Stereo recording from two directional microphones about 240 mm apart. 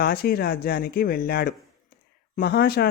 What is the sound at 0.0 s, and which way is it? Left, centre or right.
Speech, left.